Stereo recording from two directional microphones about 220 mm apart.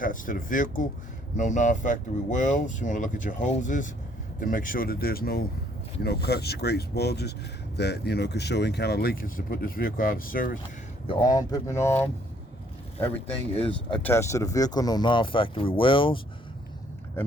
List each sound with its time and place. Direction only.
0.0 s speech: 40° left (ahead or behind)
11.0 s speech: 20° left (ahead or behind)
13.5 s speech: 25° left (ahead or behind)
13.9 s speech: 10° left (ahead or behind)